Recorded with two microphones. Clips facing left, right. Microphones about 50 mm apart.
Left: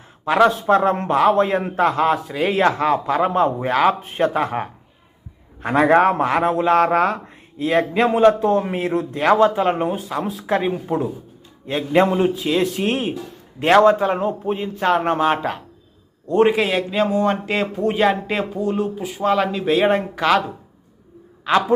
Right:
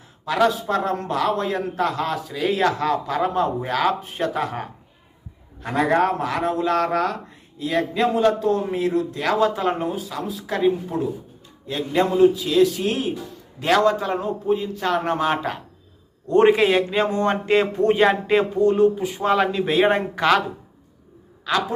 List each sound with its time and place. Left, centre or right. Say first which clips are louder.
0.3 s a man's voice: left 5 dB; left
7.6 s a man's voice: left 4 dB; left
9.2 s speech: left 6 dB; left
10.7 s a man's voice: even; left
13.7 s speech: left 5 dB; left
14.2 s speech: left 1 dB; left; by 15.4 s centre
16.3 s a man's voice: right 1 dB; centre
21.5 s speech: left 5 dB; left